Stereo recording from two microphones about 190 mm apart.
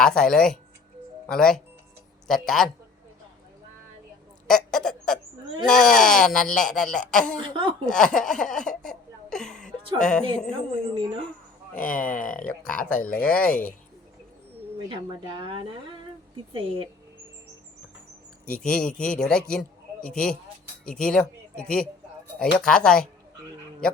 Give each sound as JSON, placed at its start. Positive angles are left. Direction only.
{"t": 0.0, "sound": "speech", "side_deg": 5}
{"t": 4.4, "sound": "owl", "side_deg": 5}
{"t": 5.6, "sound": "speech", "side_deg": 5}
{"t": 7.4, "sound": "speech", "side_deg": -25}
{"t": 7.9, "sound": "laughter", "side_deg": 5}
{"t": 10.0, "sound": "speech", "side_deg": 5}
{"t": 10.5, "sound": "speech", "side_deg": -25}
{"t": 11.8, "sound": "speech", "side_deg": 45}
{"t": 12.7, "sound": "speech", "side_deg": 5}
{"t": 14.8, "sound": "speech", "side_deg": -25}
{"t": 18.4, "sound": "a man's voice", "side_deg": 5}